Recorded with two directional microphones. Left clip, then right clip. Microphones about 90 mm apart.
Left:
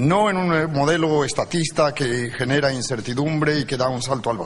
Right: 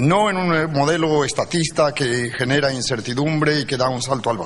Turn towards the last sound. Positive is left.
turn(degrees=-20)  # may be behind; listen again after turning